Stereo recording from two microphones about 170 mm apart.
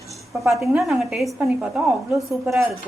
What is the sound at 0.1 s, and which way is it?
A woman's voice, centre (ahead or behind).